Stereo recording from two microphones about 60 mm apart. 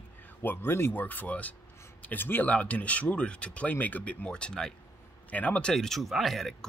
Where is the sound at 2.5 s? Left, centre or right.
Left.